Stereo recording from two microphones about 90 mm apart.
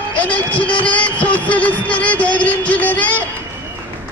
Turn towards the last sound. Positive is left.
turn(degrees=15)  # may be behind; listen again after turning